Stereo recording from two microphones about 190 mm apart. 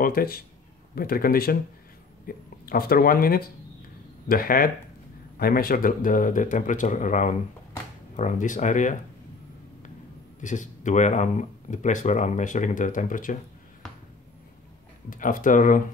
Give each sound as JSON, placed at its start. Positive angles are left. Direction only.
{"t": 0.0, "sound": "speech", "side_deg": 50}
{"t": 10.4, "sound": "speech", "side_deg": 40}
{"t": 15.0, "sound": "speech", "side_deg": 45}